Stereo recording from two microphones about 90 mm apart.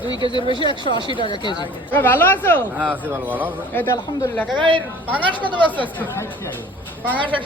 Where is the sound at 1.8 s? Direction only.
20° left (ahead or behind).